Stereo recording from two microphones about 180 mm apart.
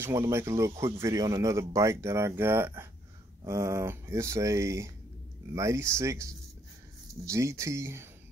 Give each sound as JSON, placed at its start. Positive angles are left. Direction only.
{"t": 0.0, "sound": "speech", "side_deg": -15}